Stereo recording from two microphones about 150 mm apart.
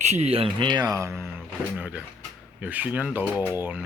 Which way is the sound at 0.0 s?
45° right (ahead or behind).